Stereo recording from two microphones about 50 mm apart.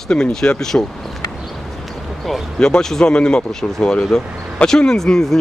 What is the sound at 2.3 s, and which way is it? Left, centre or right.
Speech, centre.